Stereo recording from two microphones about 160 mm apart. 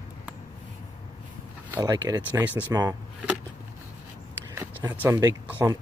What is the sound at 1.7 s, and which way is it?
Speech, 20° right (ahead or behind).